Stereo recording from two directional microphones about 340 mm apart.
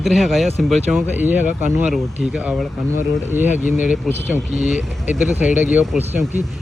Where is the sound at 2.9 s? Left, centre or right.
Left.